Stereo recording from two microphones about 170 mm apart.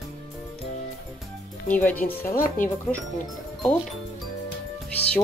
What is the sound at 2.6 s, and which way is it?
Speech, 50° left (ahead or behind).